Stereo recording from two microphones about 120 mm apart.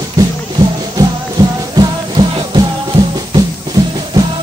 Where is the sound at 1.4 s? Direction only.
30° right (ahead or behind).